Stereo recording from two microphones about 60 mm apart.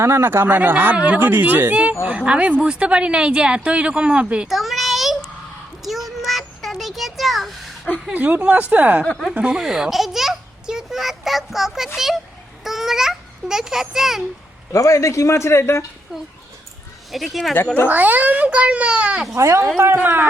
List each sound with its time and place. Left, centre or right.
0.0 s a child's voice: right; by 4.4 s centre
4.4 s child singing: centre
5.8 s a sound: centre
8.1 s a child's voice: right
9.3 s a sound: centre
11.9 s speech: centre
12.6 s babbling: centre
14.7 s a man's voice: left
16.1 s speech: centre
17.8 s a child's voice: right
19.3 s speech: right